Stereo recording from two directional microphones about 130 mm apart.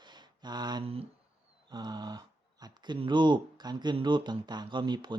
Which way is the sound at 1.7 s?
35° right (ahead or behind).